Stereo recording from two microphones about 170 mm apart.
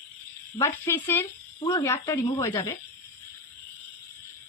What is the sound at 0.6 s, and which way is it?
Speech, 15° left (ahead or behind).